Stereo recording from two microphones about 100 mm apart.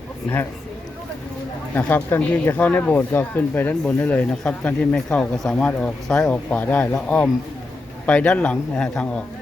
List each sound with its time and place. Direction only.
1.7 s speech: 20° left (ahead or behind)